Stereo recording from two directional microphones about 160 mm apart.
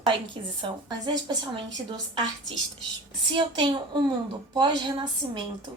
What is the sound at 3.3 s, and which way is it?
Speech, 30° right (ahead or behind).